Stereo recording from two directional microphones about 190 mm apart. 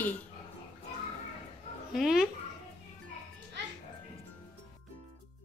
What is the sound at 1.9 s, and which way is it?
Speech, centre (ahead or behind).